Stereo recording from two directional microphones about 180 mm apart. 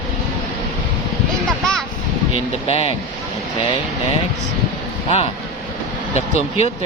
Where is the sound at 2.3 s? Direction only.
30° left (ahead or behind).